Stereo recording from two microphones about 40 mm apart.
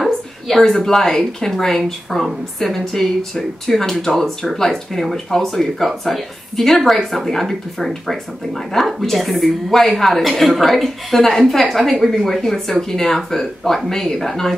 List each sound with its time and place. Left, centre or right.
0.6 s a woman's voice: centre
11.9 s a woman's voice: centre
12.4 s speech: centre